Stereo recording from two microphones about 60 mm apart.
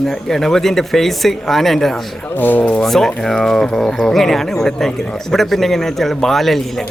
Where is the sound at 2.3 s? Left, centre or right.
Left.